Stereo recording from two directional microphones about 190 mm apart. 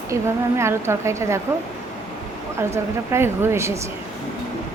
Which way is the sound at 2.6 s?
15° right (ahead or behind).